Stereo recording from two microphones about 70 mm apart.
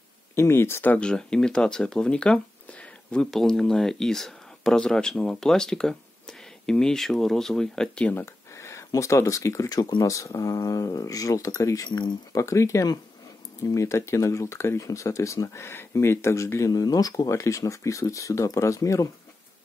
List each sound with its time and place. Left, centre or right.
0.4 s speech: left
0.9 s speech: centre
3.3 s speech: centre
8.5 s speech: left
10.0 s speech: left
13.7 s speech: left
16.7 s speech: left